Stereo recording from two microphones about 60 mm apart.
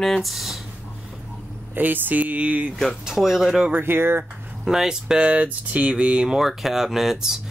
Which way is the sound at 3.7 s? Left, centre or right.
Right.